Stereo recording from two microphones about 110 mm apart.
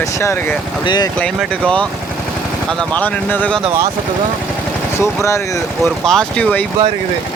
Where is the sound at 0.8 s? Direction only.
40° left (ahead or behind).